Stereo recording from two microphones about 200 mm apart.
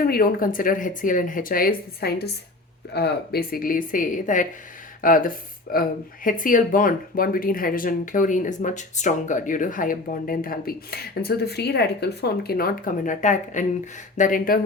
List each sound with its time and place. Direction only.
0.0 s speech: 45° left (ahead or behind)